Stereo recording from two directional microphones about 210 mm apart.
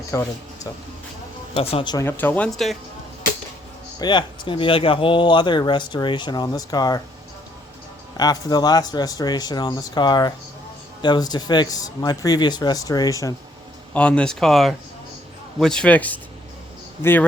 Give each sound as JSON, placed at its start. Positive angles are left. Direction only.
{"t": 0.1, "sound": "speech", "side_deg": 15}
{"t": 4.0, "sound": "speech", "side_deg": 20}
{"t": 8.2, "sound": "speech", "side_deg": 20}
{"t": 13.9, "sound": "speech", "side_deg": 5}